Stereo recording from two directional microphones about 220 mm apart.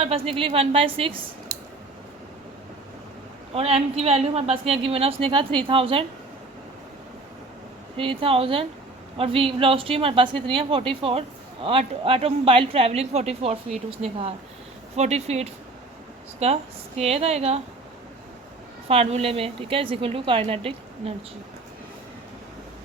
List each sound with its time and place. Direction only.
0.0 s a woman's voice: 25° right (ahead or behind)
3.5 s a woman's voice: 25° right (ahead or behind)
7.9 s a woman's voice: 25° right (ahead or behind)
18.9 s a woman's voice: 25° right (ahead or behind)